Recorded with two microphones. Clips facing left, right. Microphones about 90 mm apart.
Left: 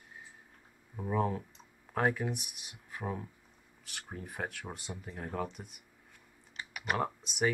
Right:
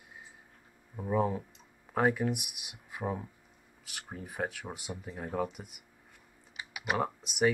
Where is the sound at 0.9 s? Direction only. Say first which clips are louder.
Right 2 dB; 5° right (ahead or behind).